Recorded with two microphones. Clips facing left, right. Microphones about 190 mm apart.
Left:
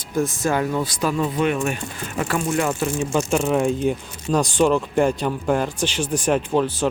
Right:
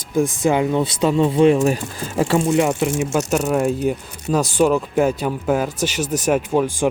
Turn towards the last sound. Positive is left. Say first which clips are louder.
# right 2 dB
turn(degrees=-10)  # may be behind; listen again after turning